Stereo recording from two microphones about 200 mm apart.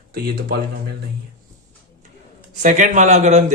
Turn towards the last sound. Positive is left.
turn(degrees=-35)  # may be behind; listen again after turning